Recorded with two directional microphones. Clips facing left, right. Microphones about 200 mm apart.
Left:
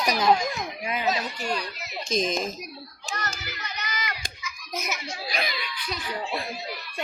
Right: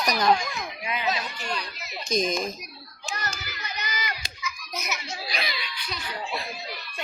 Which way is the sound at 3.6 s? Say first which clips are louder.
Even; 30° right (ahead or behind).